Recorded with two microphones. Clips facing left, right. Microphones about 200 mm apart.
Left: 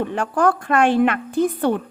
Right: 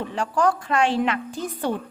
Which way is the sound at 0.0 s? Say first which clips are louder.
Left 3 dB; 55° left (ahead or behind).